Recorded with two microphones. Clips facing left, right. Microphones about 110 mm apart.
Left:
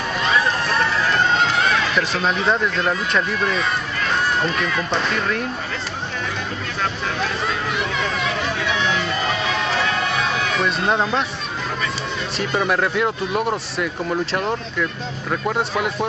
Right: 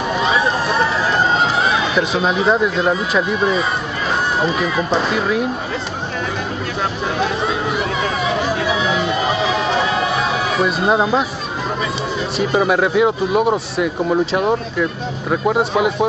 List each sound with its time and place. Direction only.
0.1 s run: 5° right (ahead or behind)
4.4 s speech: 5° right (ahead or behind)
7.4 s chatter: 5° right (ahead or behind)
8.6 s music: 5° right (ahead or behind)
12.4 s speech: 5° right (ahead or behind)